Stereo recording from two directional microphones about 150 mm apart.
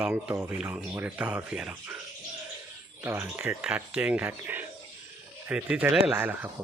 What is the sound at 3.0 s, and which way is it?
Speech, 10° right (ahead or behind).